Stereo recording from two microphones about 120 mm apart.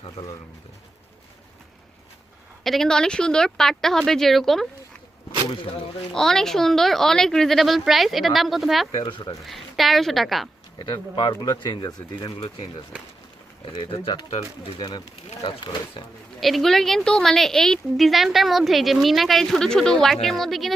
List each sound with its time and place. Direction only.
2.6 s a woman's voice: 5° left (ahead or behind)
6.1 s a woman's voice: 5° left (ahead or behind)
9.0 s speech: 45° left (ahead or behind)
9.5 s a woman's voice: centre (ahead or behind)
10.8 s speech: 35° left (ahead or behind)
13.7 s speech: 45° left (ahead or behind)
16.4 s a woman's voice: centre (ahead or behind)